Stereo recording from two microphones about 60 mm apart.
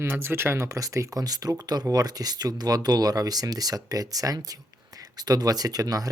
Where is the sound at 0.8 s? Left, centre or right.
Right.